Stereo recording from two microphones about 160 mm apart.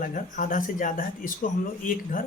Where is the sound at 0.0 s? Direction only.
55° left (ahead or behind).